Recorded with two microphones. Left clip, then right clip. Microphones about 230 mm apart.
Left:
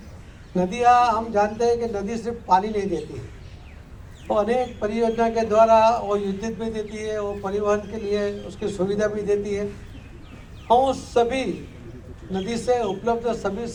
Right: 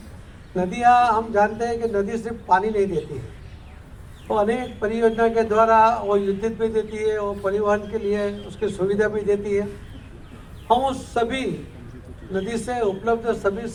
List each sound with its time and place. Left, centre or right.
0.5 s a man's voice: left
4.4 s a man's voice: left
10.7 s a man's voice: left